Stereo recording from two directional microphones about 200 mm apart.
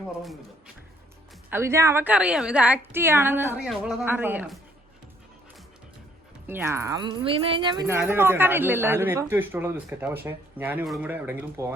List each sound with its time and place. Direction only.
1.5 s a woman's voice: 10° right (ahead or behind)
6.5 s speech: 10° right (ahead or behind)
7.9 s a woman's voice: 10° right (ahead or behind)